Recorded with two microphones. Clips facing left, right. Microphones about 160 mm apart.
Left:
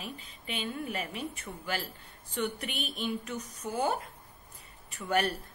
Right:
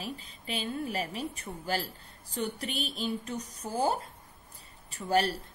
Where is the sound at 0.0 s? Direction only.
35° right (ahead or behind).